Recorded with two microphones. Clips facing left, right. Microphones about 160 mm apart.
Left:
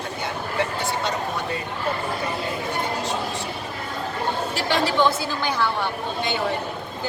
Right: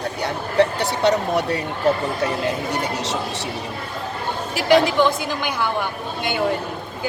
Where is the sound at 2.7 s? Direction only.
80° right.